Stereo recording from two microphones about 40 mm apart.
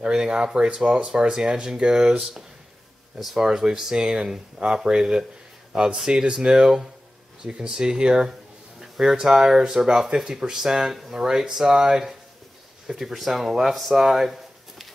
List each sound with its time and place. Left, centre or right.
0.0 s speech: centre
12.8 s speech: centre